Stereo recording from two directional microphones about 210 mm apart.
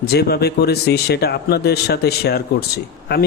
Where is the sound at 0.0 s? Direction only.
50° left (ahead or behind).